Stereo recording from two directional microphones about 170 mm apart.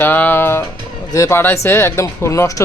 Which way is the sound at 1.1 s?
15° left (ahead or behind).